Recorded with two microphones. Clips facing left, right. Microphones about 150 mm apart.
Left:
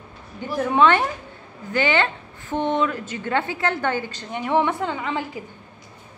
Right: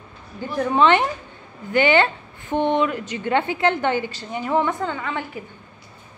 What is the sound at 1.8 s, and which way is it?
Speech, 30° right (ahead or behind).